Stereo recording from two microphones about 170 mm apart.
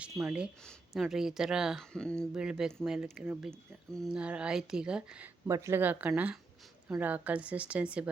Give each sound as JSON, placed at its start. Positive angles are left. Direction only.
{"t": 0.2, "sound": "speech", "side_deg": -10}
{"t": 5.5, "sound": "a woman's voice", "side_deg": -15}